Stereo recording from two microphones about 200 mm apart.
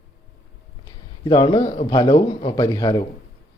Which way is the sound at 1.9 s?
20° left (ahead or behind).